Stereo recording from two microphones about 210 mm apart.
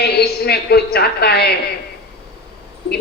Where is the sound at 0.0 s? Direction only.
50° left (ahead or behind).